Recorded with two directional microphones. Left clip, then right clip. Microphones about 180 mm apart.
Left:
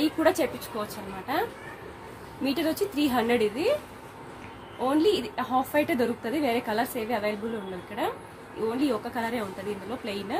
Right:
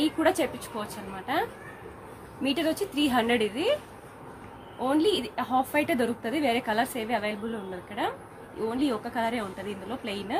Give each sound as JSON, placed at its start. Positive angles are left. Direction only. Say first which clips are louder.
{"t": 0.0, "sound": "a woman's voice", "louder": "left 1 dB", "side_deg": 0}
{"t": 4.7, "sound": "a woman's voice", "louder": "left 1 dB", "side_deg": 0}